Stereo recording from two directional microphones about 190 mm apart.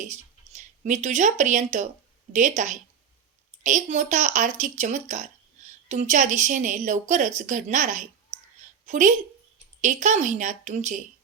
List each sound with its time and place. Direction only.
0.0 s a woman's voice: 40° right (ahead or behind)